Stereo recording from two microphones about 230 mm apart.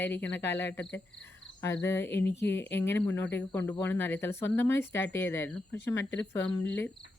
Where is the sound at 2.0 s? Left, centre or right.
Left.